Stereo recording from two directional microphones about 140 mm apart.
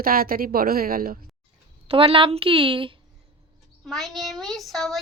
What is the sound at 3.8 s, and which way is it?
A child's voice, centre (ahead or behind).